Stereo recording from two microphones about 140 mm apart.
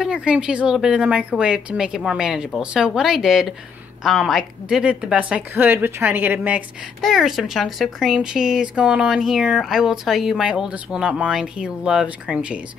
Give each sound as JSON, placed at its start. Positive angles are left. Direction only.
{"t": 0.0, "sound": "speech", "side_deg": -5}
{"t": 7.0, "sound": "speech", "side_deg": 0}